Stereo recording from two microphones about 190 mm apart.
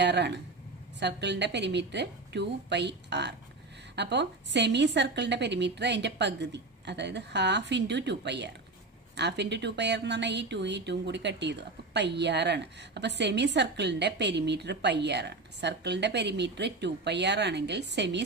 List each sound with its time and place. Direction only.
0.0 s a woman's voice: 60° right (ahead or behind)